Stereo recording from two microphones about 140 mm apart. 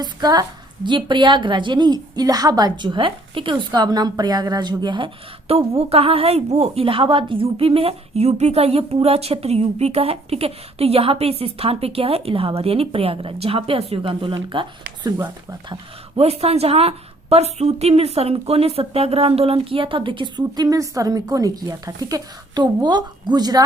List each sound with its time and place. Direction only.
0.0 s a woman's voice: 30° right (ahead or behind)
15.2 s speech: 20° right (ahead or behind)
16.1 s a woman's voice: 50° right (ahead or behind); by 23.6 s 30° right (ahead or behind)